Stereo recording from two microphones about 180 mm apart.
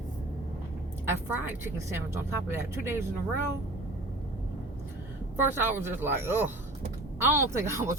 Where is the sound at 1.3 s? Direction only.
10° right (ahead or behind).